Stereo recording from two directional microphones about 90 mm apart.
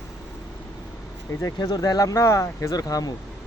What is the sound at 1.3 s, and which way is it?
Speech, 40° left (ahead or behind).